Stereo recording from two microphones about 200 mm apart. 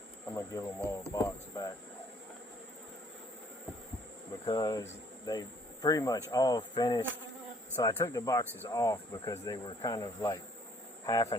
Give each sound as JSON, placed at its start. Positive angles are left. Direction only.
{"t": 0.3, "sound": "speech", "side_deg": 15}
{"t": 4.4, "sound": "speech", "side_deg": 20}